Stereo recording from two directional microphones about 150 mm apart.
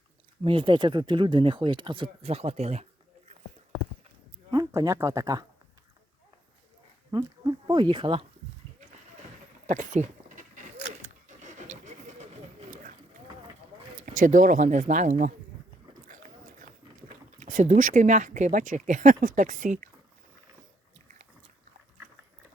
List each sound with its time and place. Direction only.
0.4 s speech: 35° right (ahead or behind)
4.5 s speech: 25° right (ahead or behind)
7.1 s speech: 25° right (ahead or behind)
9.6 s vehicle: 55° right (ahead or behind)
14.0 s speech: 60° right (ahead or behind)
17.4 s speech: 55° right (ahead or behind)